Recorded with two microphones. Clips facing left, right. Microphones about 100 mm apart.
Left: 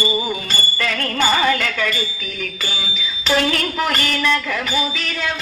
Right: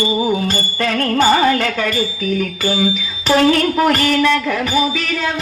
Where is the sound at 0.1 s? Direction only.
40° right (ahead or behind).